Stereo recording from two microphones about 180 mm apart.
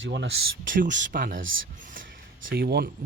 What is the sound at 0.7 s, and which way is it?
Speech, 45° right (ahead or behind).